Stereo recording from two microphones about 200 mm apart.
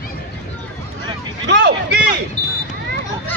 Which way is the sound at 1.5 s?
60° right (ahead or behind).